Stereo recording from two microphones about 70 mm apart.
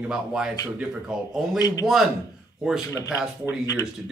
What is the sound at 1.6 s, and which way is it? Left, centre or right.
Speech, left.